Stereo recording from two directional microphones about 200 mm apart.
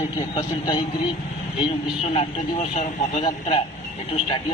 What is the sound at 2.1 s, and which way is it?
A man's voice, 35° left (ahead or behind).